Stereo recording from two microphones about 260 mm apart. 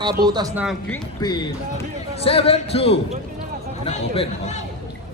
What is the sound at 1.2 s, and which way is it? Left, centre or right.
Speech, centre.